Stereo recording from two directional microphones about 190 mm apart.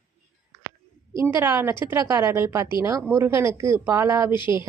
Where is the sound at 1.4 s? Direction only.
10° right (ahead or behind).